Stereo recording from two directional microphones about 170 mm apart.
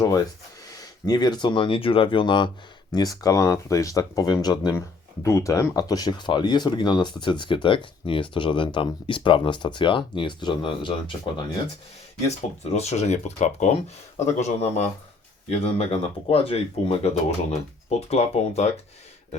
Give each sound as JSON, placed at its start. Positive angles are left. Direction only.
{"t": 0.0, "sound": "speech", "side_deg": 20}
{"t": 12.3, "sound": "speech", "side_deg": 40}